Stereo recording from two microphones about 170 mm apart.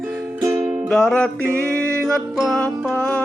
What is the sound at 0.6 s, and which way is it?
Music, 5° right (ahead or behind).